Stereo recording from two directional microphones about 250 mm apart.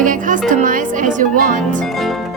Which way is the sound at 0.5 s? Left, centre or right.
Right.